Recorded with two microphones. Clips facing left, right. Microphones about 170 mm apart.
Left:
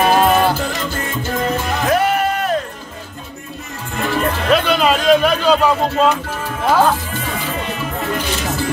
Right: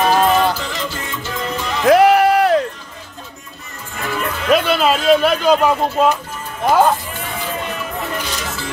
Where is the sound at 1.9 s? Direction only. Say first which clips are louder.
Right 7 dB; 90° right.